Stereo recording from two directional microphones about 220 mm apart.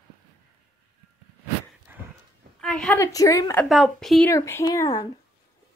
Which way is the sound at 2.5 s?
5° left (ahead or behind).